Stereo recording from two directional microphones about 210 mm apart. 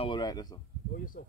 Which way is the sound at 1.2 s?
40° left (ahead or behind).